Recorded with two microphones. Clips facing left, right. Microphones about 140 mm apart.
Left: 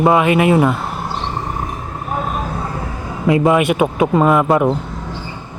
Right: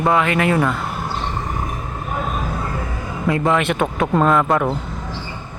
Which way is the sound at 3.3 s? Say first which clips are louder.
Left 5 dB; 15° left (ahead or behind).